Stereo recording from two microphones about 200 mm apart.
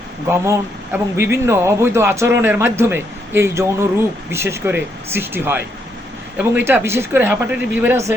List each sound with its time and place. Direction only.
0.3 s a man's voice: 15° right (ahead or behind)